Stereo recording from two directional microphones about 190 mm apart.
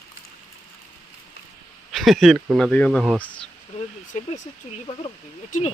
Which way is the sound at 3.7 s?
40° left (ahead or behind).